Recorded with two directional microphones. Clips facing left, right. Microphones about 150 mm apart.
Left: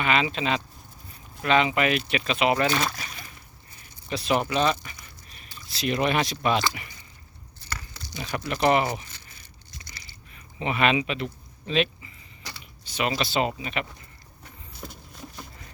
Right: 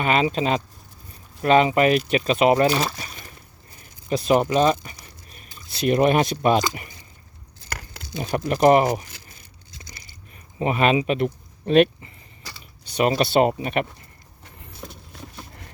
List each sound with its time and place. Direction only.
0.0 s speech: 40° right (ahead or behind)
2.8 s speech: centre (ahead or behind)
4.1 s speech: 45° right (ahead or behind)
5.5 s speech: 45° right (ahead or behind)
8.2 s speech: 40° right (ahead or behind)
10.6 s speech: 40° right (ahead or behind)
13.0 s speech: 45° right (ahead or behind)
13.2 s speech: 55° right (ahead or behind)